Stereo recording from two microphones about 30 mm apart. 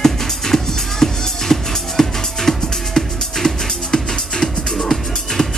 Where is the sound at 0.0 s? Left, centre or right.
Centre.